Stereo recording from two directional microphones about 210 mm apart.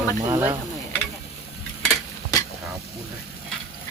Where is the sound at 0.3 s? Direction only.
15° right (ahead or behind).